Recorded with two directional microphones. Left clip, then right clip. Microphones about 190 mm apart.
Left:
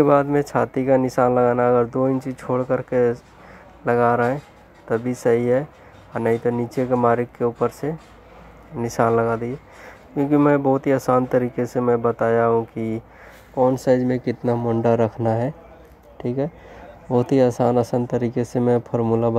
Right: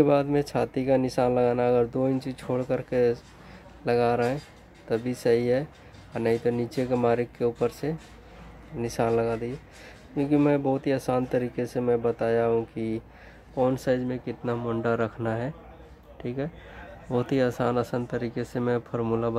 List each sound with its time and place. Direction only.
0.0 s speech: centre (ahead or behind)
13.8 s speech: 30° left (ahead or behind)
14.6 s speech: 20° left (ahead or behind)